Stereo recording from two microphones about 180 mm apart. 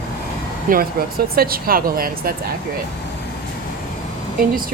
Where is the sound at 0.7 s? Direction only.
55° right (ahead or behind).